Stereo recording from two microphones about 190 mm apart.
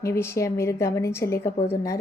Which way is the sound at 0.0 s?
15° left (ahead or behind).